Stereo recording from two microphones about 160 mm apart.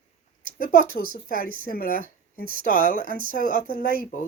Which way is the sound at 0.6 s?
65° left (ahead or behind).